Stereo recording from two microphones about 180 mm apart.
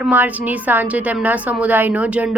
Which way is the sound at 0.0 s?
10° right (ahead or behind).